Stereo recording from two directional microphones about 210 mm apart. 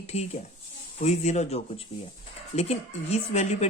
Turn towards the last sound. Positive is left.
turn(degrees=30)  # may be behind; listen again after turning